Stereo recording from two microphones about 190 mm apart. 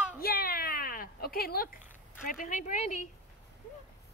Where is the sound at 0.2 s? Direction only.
55° left (ahead or behind).